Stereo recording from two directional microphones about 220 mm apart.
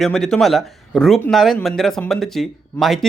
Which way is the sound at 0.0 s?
Centre (ahead or behind).